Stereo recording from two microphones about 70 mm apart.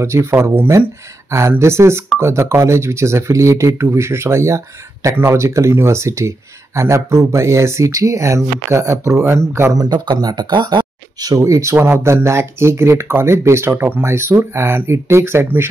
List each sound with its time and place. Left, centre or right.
0.0 s speech: right
9.8 s speech: right
11.4 s speech: right
11.7 s speech: right